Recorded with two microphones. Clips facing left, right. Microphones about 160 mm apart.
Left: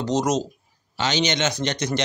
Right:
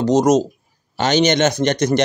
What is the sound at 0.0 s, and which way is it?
Speech, 45° right (ahead or behind).